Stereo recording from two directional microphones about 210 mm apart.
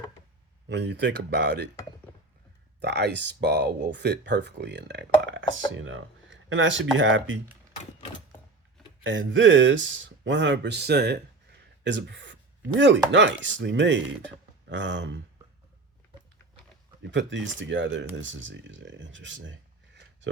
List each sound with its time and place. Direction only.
0.7 s speech: 55° right (ahead or behind)
2.8 s speech: 55° right (ahead or behind)
9.0 s speech: 65° right (ahead or behind)
17.1 s speech: 60° right (ahead or behind)